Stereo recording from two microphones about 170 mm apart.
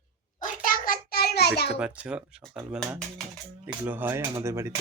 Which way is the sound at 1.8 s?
5° right (ahead or behind).